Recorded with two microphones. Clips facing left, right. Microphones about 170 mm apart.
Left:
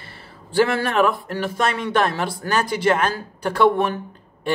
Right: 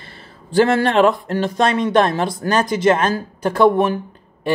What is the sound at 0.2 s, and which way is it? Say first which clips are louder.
Speech: right 3 dB; 25° right (ahead or behind).